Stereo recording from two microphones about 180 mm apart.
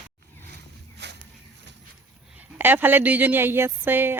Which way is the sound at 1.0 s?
75° right (ahead or behind).